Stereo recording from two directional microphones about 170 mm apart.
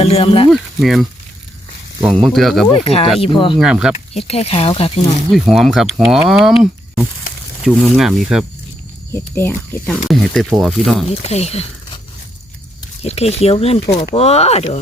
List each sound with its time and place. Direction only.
0.0 s speech: 35° left (ahead or behind)
0.5 s speech: centre (ahead or behind)
2.1 s speech: centre (ahead or behind)
2.7 s speech: 35° left (ahead or behind)
3.6 s speech: 5° right (ahead or behind)
3.9 s speech: 40° left (ahead or behind)
5.3 s speech: centre (ahead or behind)
9.1 s speech: 15° left (ahead or behind)
11.1 s speech: 35° left (ahead or behind)
13.1 s speech: 35° left (ahead or behind)
13.9 s speech: 80° left
14.2 s speech: 35° left (ahead or behind)